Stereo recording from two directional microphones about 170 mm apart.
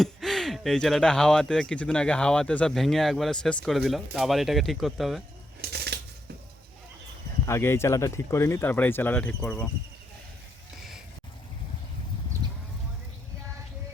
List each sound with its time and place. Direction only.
0.0 s speech: centre (ahead or behind)
5.6 s shuffling cards: 70° right (ahead or behind)
7.4 s speech: 15° left (ahead or behind)
12.4 s a sound: 25° right (ahead or behind)